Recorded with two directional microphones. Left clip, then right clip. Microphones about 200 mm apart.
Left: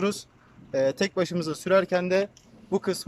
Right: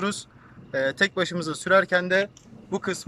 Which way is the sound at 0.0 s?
10° left (ahead or behind).